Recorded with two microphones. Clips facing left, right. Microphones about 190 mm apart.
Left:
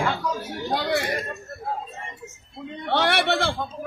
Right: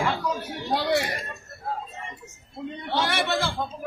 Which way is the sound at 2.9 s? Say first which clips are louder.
Left 4 dB; 65° left (ahead or behind).